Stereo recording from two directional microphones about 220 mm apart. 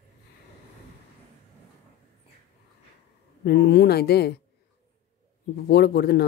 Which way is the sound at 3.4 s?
50° left (ahead or behind).